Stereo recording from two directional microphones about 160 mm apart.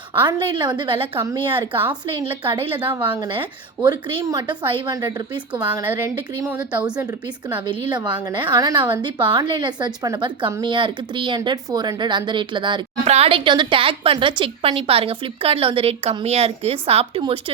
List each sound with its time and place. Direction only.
0.1 s a woman's voice: 30° right (ahead or behind)
2.6 s a woman's voice: 10° right (ahead or behind)
3.2 s a woman's voice: 30° right (ahead or behind)
5.5 s a woman's voice: 15° right (ahead or behind)
7.7 s a woman's voice: 30° right (ahead or behind)